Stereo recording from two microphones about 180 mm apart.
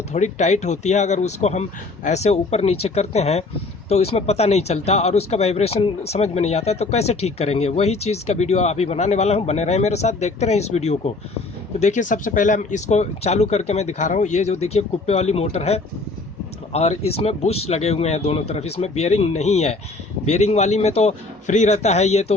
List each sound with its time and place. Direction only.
0.1 s speech: 40° left (ahead or behind)